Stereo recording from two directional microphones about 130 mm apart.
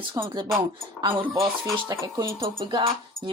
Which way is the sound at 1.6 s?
30° right (ahead or behind).